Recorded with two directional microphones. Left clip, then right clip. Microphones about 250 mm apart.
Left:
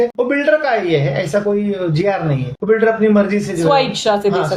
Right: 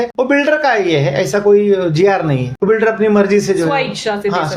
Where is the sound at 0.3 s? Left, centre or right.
Right.